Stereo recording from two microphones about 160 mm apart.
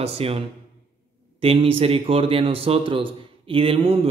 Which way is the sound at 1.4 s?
35° right (ahead or behind).